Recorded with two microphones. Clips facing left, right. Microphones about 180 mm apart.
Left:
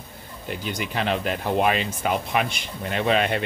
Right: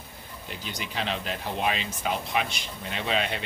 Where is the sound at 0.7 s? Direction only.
55° left (ahead or behind).